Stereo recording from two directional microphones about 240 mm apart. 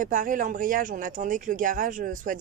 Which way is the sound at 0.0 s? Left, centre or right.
Right.